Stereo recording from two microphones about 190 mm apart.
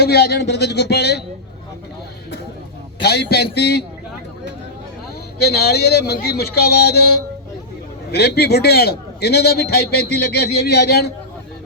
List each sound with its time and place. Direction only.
0.0 s a man's voice: 55° left (ahead or behind)
3.0 s a man's voice: 60° left (ahead or behind)
5.4 s a man's voice: 60° left (ahead or behind)